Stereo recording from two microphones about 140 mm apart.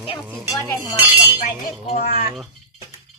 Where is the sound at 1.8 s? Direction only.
75° left (ahead or behind).